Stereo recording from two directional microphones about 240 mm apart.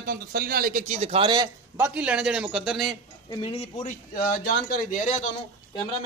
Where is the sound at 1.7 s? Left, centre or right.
Centre.